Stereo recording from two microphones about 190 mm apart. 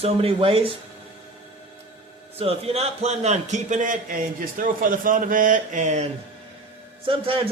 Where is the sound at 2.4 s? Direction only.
30° right (ahead or behind).